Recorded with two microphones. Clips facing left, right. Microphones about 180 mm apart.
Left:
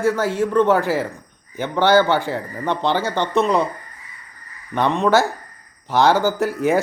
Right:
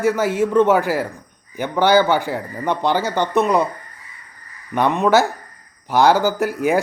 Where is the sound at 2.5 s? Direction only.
15° right (ahead or behind).